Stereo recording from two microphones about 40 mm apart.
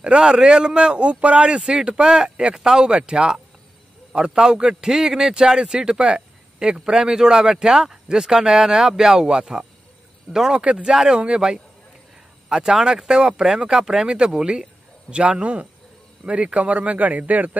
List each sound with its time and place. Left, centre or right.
0.0 s a man's voice: right
1.6 s a man's voice: centre; by 17.5 s right